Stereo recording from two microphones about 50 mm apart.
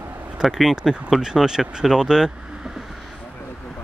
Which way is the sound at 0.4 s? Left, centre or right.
Centre.